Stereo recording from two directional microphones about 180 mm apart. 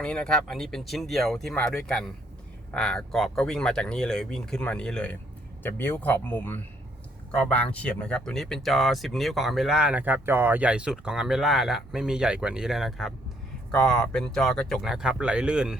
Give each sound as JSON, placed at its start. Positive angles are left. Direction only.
{"t": 0.0, "sound": "speech", "side_deg": 5}